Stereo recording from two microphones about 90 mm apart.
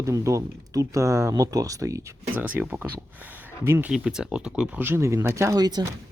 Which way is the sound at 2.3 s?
20° right (ahead or behind).